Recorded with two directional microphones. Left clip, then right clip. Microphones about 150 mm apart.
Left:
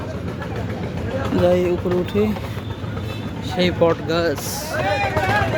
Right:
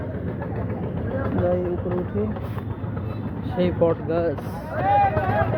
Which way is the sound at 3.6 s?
35° left (ahead or behind).